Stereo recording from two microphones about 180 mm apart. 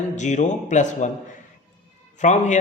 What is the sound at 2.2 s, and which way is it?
Speech, 40° left (ahead or behind).